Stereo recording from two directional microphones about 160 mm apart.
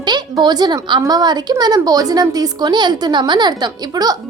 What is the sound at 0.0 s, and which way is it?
Speech, 25° right (ahead or behind).